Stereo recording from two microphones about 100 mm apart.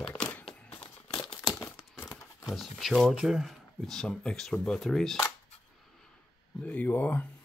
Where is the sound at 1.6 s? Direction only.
30° left (ahead or behind).